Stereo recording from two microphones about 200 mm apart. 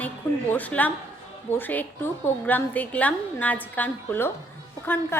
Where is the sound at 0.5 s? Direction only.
10° left (ahead or behind).